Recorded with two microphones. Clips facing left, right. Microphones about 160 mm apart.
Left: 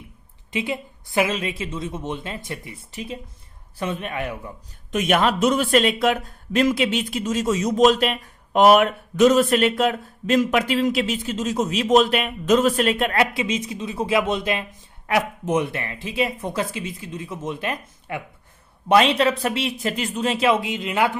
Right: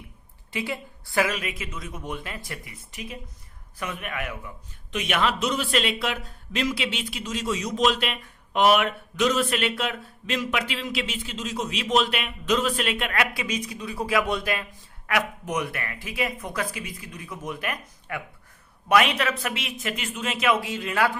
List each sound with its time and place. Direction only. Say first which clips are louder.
0.5 s speech: left 4 dB; 20° left (ahead or behind)
4.9 s speech: left 6 dB; 45° left (ahead or behind)
13.3 s speech: left 5 dB; 25° left (ahead or behind)